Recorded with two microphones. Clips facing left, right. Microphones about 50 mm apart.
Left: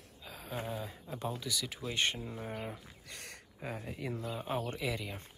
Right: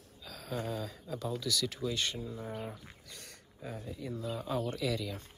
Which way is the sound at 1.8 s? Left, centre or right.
Left.